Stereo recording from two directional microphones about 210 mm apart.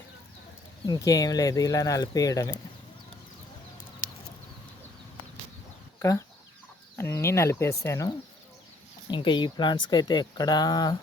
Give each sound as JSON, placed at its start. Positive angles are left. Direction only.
{"t": 0.9, "sound": "speech", "side_deg": 15}
{"t": 6.0, "sound": "speech", "side_deg": 15}